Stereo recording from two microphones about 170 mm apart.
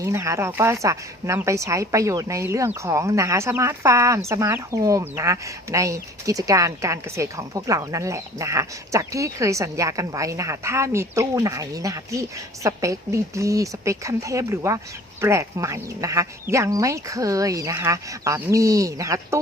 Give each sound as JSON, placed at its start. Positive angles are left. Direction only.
{"t": 0.0, "sound": "speech", "side_deg": -15}